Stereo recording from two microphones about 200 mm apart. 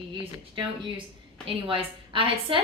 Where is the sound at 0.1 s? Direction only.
25° right (ahead or behind).